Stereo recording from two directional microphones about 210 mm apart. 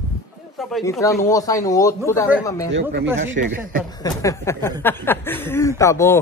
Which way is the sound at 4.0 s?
15° left (ahead or behind).